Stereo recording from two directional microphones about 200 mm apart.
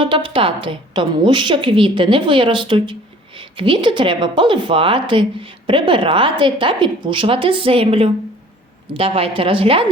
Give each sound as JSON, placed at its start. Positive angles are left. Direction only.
{"t": 0.0, "sound": "speech", "side_deg": -25}